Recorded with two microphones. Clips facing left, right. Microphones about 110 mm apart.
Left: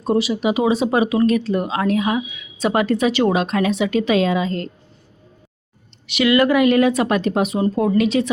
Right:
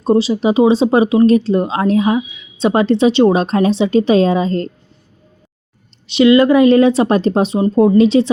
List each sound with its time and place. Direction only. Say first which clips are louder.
0.0 s speech: right 5 dB; 30° right (ahead or behind)
6.1 s speech: right 6 dB; 25° right (ahead or behind)